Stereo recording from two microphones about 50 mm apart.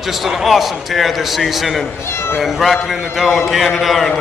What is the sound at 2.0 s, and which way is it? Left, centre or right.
Speech, left.